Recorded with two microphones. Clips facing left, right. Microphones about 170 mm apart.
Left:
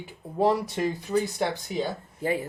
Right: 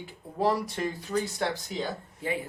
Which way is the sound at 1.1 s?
10° left (ahead or behind).